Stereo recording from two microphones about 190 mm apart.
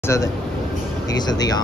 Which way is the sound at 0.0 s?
15° left (ahead or behind).